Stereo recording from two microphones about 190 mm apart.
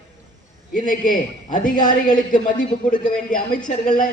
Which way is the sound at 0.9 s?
45° left (ahead or behind).